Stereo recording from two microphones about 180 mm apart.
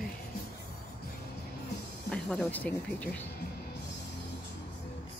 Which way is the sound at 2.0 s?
5° left (ahead or behind).